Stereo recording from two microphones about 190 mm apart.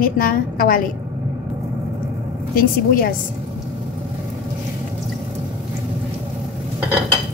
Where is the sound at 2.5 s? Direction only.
50° left (ahead or behind).